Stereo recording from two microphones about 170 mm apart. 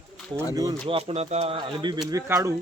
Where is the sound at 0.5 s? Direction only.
20° right (ahead or behind).